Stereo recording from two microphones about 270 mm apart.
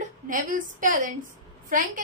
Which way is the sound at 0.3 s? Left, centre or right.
Right.